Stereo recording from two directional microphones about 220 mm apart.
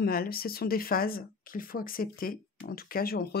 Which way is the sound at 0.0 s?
40° left (ahead or behind).